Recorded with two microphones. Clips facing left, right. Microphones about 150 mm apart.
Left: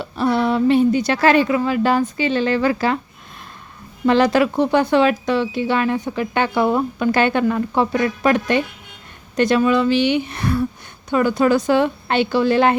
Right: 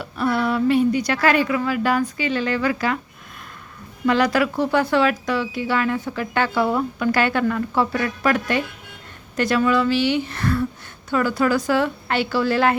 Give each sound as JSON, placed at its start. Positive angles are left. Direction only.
{"t": 0.0, "sound": "speech", "side_deg": 25}
{"t": 4.0, "sound": "speech", "side_deg": 25}